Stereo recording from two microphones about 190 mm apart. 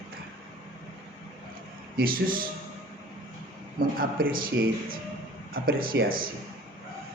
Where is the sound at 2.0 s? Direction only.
50° right (ahead or behind).